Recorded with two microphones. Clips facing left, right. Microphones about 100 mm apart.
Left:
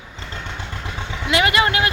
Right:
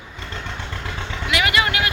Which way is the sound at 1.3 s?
30° left (ahead or behind).